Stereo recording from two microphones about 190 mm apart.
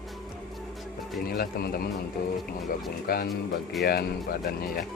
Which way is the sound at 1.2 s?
55° left (ahead or behind).